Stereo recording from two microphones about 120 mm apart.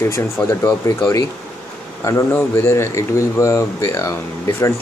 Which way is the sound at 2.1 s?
20° left (ahead or behind).